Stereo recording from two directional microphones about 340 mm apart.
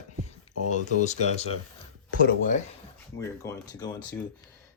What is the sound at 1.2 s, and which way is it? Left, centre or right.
Speech, centre.